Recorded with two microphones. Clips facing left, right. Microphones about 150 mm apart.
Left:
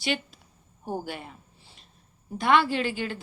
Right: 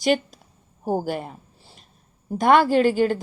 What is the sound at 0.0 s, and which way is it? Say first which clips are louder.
A woman's voice: right 9 dB; 45° right (ahead or behind).